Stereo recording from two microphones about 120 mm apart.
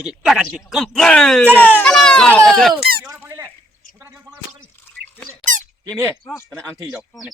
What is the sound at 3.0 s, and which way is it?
Squeak, 15° right (ahead or behind).